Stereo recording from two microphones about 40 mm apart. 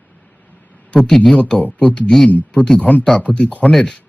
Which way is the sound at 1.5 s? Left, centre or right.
Left.